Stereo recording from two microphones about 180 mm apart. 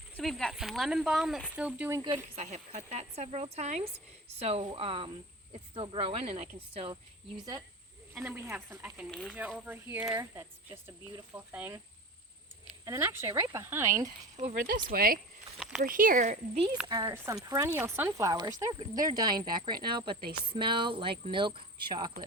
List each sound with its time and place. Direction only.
0.2 s speech: centre (ahead or behind)
2.0 s speech: 20° right (ahead or behind)
2.3 s speech: 40° right (ahead or behind)
8.1 s speech: 5° right (ahead or behind)
9.6 s speech: 10° right (ahead or behind)
12.8 s speech: 15° right (ahead or behind)
14.3 s speech: 45° right (ahead or behind)
14.8 s speech: 55° right (ahead or behind)
15.5 s a sound: 5° right (ahead or behind)
15.8 s speech: 50° right (ahead or behind)
16.8 s speech: 20° right (ahead or behind)